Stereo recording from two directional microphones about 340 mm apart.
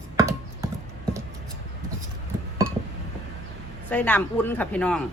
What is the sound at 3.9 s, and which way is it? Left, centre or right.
Speech, centre.